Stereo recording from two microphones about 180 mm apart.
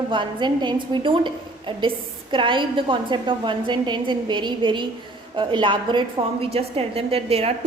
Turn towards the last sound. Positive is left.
turn(degrees=-35)  # may be behind; listen again after turning